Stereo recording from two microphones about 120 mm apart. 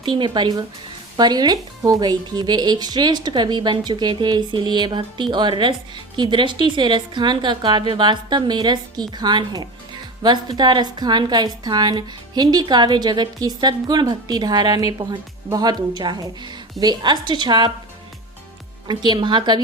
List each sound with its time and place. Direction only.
0.0 s speech: 40° right (ahead or behind)
18.9 s speech: 40° right (ahead or behind)